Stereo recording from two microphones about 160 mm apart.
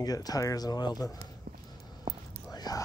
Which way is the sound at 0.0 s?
25° left (ahead or behind).